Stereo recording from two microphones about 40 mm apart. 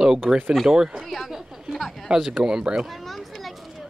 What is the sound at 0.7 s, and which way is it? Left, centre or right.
Speech, centre.